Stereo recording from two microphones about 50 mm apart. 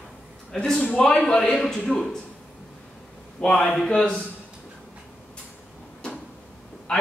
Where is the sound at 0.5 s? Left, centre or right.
Centre.